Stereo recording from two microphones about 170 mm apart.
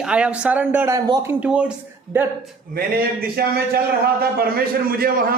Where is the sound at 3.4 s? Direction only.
70° right (ahead or behind).